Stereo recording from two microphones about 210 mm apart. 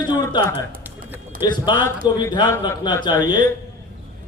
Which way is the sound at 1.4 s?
20° left (ahead or behind).